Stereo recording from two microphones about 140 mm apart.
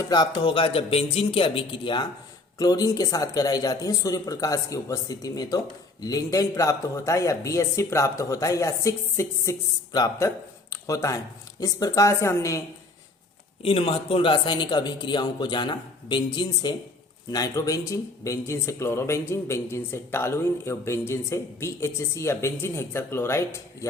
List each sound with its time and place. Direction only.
0.0 s a man's voice: 30° left (ahead or behind)
13.6 s a man's voice: 40° left (ahead or behind); by 23.4 s 20° left (ahead or behind)